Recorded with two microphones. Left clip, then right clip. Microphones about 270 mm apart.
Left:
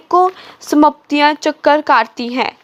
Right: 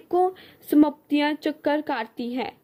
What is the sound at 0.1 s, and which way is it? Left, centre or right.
A woman's voice, centre.